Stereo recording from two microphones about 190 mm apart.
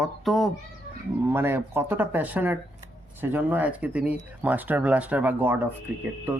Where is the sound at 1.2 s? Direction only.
10° right (ahead or behind).